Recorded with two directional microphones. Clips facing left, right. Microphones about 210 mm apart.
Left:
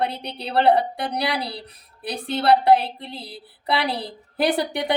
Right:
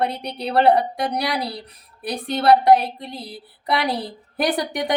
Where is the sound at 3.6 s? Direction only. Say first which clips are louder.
Right 2 dB; 30° left (ahead or behind).